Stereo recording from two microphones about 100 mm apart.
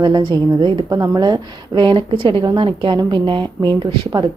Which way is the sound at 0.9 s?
35° right (ahead or behind).